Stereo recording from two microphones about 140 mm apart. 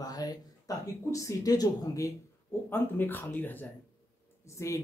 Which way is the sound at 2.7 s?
15° left (ahead or behind).